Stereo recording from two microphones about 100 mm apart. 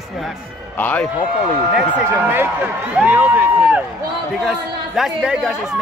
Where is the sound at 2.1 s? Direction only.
20° right (ahead or behind).